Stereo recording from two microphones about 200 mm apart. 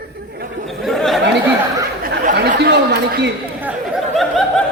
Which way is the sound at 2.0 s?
50° right (ahead or behind).